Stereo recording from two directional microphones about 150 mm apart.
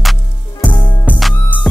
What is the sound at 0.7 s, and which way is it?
Music, 30° left (ahead or behind).